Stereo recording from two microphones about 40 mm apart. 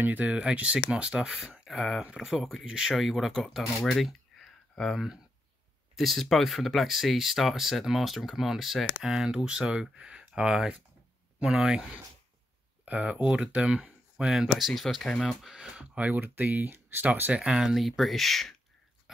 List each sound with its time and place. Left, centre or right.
0.2 s speech: right; by 8.8 s centre
9.0 s speech: centre
12.8 s speech: right
14.1 s speech: centre
15.0 s speech: centre
15.5 s speech: right
16.1 s speech: right
17.1 s speech: right
17.4 s speech: centre
17.7 s speech: centre
19.1 s speech: centre